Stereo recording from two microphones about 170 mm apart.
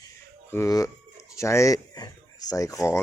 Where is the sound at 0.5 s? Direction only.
20° left (ahead or behind).